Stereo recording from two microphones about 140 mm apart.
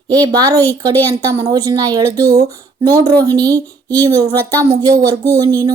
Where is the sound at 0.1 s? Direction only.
30° right (ahead or behind).